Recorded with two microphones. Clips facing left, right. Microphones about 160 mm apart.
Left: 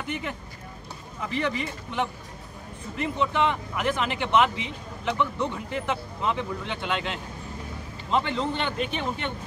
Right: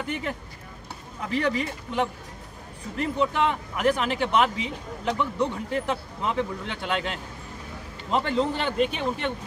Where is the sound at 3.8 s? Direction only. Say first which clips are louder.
Right 4 dB; 40° right (ahead or behind).